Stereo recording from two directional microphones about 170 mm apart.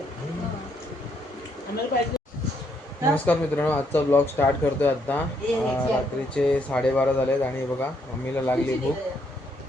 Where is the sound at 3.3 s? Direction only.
10° left (ahead or behind).